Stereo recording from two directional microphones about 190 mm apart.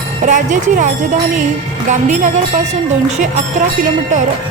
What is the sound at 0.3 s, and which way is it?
Speech, 40° right (ahead or behind).